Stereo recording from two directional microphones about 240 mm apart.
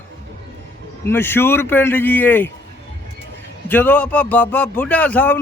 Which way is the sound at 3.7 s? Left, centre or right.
Centre.